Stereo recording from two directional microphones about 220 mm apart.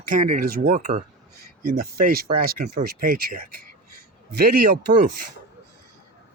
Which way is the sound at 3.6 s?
45° right (ahead or behind).